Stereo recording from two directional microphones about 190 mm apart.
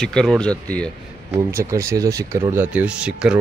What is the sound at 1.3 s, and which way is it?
Speech, 15° right (ahead or behind).